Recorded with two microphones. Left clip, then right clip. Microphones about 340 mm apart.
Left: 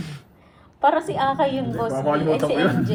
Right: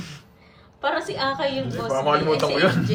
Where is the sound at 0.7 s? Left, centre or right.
Centre.